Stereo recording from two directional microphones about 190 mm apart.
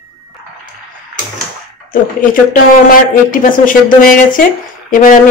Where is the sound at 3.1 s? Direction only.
45° left (ahead or behind).